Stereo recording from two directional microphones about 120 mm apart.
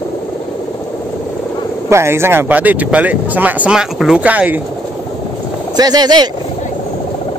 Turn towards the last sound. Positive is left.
turn(degrees=-35)  # may be behind; listen again after turning